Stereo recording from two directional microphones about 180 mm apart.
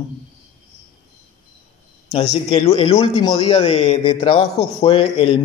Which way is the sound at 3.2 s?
20° left (ahead or behind).